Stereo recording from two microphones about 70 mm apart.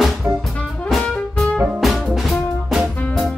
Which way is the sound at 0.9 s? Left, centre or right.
Centre.